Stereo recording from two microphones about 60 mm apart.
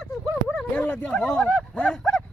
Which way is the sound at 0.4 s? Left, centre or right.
Left.